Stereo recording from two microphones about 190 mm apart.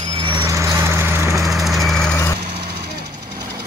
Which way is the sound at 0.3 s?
15° right (ahead or behind).